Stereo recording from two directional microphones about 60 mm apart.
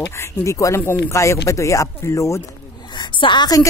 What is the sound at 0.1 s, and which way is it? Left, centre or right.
Speech, left.